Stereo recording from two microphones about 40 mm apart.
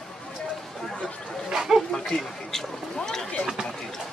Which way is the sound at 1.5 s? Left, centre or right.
Centre.